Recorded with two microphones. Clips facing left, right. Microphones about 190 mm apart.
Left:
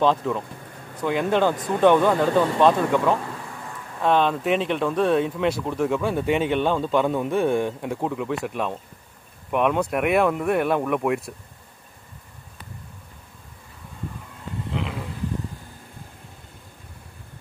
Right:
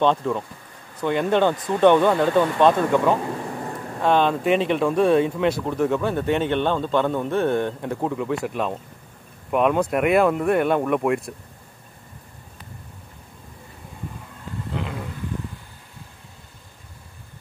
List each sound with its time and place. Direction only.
0.0 s speech: centre (ahead or behind)
3.4 s a sound: 40° right (ahead or behind)
4.0 s speech: centre (ahead or behind)
14.7 s vehicle: centre (ahead or behind)